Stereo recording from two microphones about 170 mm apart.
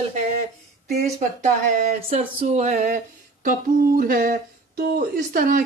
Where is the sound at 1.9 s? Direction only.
40° right (ahead or behind).